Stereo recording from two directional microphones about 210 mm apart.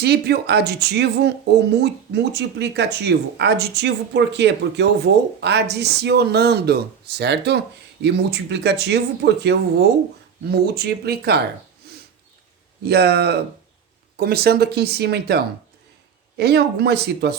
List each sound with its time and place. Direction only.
0.0 s speech: 50° right (ahead or behind)
12.8 s speech: 50° right (ahead or behind)
16.4 s speech: 50° right (ahead or behind)